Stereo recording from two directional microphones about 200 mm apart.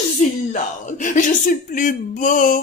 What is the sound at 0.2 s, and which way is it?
Speech, 40° left (ahead or behind).